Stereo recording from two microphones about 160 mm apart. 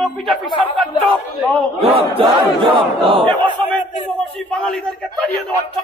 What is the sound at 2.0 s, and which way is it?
Battle cry, 35° right (ahead or behind).